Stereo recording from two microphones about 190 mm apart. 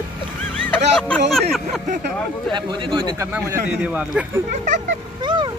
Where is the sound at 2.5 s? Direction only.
25° right (ahead or behind).